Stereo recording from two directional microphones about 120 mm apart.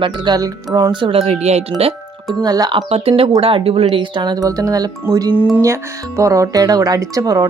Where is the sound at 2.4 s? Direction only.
35° right (ahead or behind).